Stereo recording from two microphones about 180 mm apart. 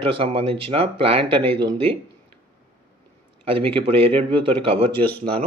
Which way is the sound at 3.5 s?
30° right (ahead or behind).